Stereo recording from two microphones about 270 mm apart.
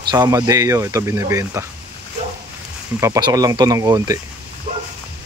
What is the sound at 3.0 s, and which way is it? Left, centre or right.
Speech, centre.